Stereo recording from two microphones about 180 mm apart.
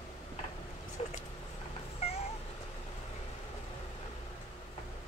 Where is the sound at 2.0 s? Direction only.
35° left (ahead or behind).